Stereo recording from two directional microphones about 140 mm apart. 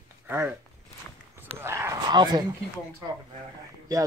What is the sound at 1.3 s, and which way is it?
Speech, 20° right (ahead or behind).